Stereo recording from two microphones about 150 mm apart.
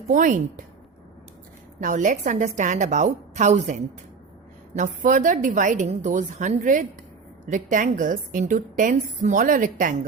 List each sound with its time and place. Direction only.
0.1 s a woman's voice: 60° right (ahead or behind)
1.8 s a woman's voice: 60° right (ahead or behind)